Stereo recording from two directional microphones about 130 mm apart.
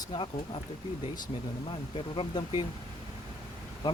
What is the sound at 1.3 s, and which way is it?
Speech, 45° left (ahead or behind).